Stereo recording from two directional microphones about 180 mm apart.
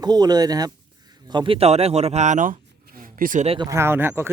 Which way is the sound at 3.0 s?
45° right (ahead or behind).